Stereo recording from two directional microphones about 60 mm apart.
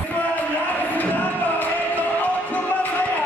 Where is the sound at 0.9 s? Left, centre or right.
Left.